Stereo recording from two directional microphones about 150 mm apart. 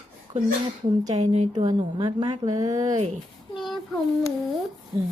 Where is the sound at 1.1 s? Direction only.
50° right (ahead or behind).